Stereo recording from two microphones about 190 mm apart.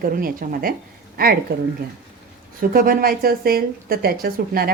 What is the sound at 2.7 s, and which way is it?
Speech, 50° right (ahead or behind).